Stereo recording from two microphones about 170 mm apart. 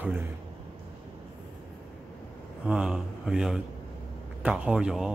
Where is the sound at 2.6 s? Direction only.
5° right (ahead or behind).